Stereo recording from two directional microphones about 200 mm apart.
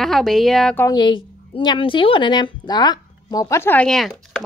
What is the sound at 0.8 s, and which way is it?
A woman's voice, 20° left (ahead or behind).